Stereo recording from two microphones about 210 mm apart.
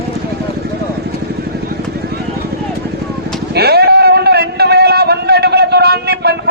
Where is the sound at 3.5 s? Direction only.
50° right (ahead or behind).